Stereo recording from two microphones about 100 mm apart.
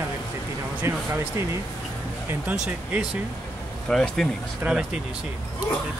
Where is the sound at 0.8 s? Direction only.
25° right (ahead or behind).